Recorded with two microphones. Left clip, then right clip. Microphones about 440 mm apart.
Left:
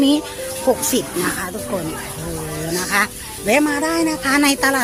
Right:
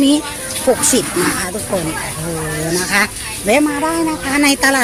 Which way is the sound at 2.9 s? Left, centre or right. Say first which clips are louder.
Right 1 dB; left.